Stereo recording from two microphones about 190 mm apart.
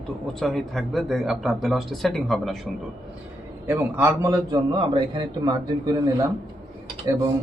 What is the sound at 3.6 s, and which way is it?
A man's voice, 10° right (ahead or behind).